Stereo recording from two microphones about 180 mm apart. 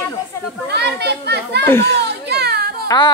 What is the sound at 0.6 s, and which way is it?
A child's voice, 65° right (ahead or behind).